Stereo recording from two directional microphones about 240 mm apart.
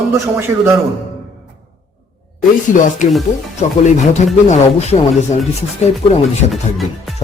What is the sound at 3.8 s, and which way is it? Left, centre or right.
Speech, left.